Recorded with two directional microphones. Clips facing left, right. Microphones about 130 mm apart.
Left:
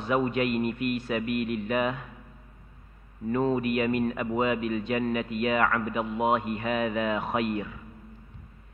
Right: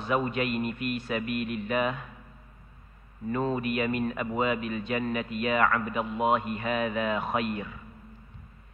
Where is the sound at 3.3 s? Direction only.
20° left (ahead or behind).